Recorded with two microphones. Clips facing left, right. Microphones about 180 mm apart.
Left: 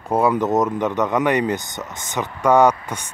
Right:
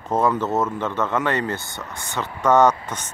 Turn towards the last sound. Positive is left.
turn(degrees=10)  # may be behind; listen again after turning